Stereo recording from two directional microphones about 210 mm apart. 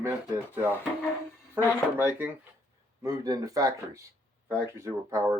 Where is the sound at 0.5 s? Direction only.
10° right (ahead or behind).